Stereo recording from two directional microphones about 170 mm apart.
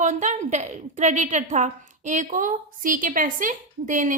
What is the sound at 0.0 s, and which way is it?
A woman's voice, 45° right (ahead or behind).